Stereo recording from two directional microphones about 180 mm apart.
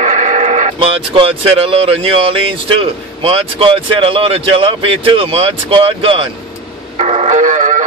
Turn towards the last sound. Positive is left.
turn(degrees=-45)  # may be behind; listen again after turning